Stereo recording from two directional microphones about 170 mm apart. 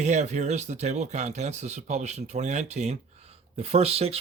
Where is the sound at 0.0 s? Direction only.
45° right (ahead or behind).